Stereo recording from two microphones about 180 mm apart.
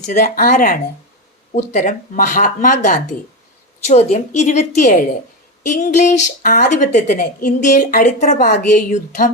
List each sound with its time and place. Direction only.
0.0 s a woman's voice: 40° left (ahead or behind)